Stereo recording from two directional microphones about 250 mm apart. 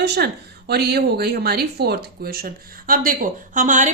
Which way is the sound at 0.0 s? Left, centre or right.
Right.